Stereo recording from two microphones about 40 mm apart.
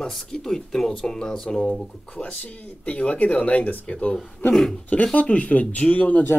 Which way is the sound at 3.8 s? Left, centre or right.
Left.